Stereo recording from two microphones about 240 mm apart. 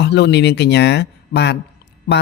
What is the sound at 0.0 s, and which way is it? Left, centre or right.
Speech, left.